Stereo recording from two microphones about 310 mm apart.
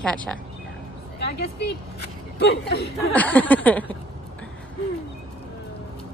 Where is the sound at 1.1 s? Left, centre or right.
Left.